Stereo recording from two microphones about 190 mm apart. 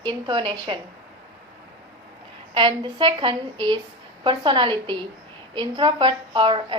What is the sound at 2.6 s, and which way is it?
A woman's voice, 25° right (ahead or behind).